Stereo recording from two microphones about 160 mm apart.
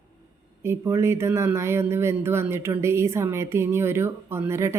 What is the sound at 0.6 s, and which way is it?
Speech, 15° right (ahead or behind).